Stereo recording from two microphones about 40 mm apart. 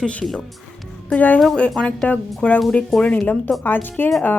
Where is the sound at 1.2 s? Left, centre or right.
Left.